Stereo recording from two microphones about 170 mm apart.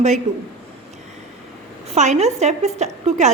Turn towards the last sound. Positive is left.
turn(degrees=-40)  # may be behind; listen again after turning